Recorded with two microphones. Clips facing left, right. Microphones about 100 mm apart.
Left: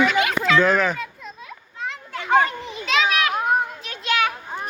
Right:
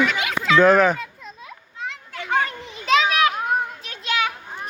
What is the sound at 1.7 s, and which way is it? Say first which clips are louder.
Children playing: left 2 dB; 45° left (ahead or behind).